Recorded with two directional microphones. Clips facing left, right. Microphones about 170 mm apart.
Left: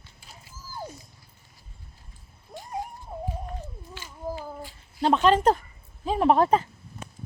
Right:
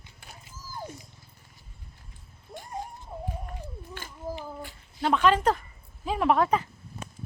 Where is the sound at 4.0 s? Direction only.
55° right (ahead or behind).